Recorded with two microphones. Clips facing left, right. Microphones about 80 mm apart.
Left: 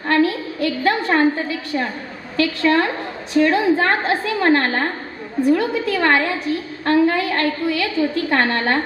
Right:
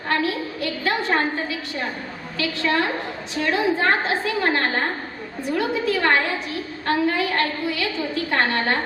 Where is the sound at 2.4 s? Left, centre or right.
Left.